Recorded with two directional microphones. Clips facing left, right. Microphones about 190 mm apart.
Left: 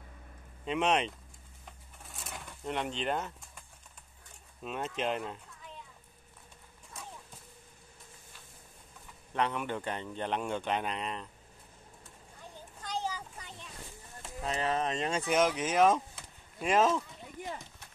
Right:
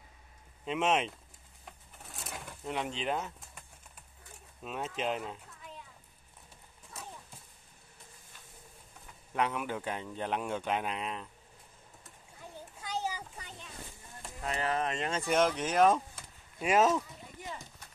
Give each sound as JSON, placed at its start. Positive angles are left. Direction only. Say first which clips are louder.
{"t": 0.7, "sound": "speech", "louder": "left 1 dB", "side_deg": 0}
{"t": 2.0, "sound": "a sound", "louder": "right 1 dB", "side_deg": 0}
{"t": 4.6, "sound": "speech", "louder": "left 1 dB", "side_deg": 0}
{"t": 6.9, "sound": "clip-clop", "louder": "right 1 dB", "side_deg": 0}
{"t": 9.3, "sound": "speech", "louder": "even", "side_deg": -5}
{"t": 12.8, "sound": "a sound", "louder": "even", "side_deg": -10}
{"t": 14.4, "sound": "speech", "louder": "left 1 dB", "side_deg": 25}
{"t": 15.0, "sound": "speech", "louder": "even", "side_deg": 5}